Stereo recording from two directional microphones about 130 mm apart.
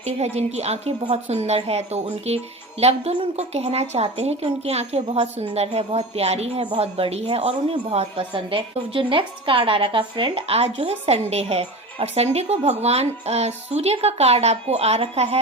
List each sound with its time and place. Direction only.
0.0 s a woman's voice: 55° right (ahead or behind)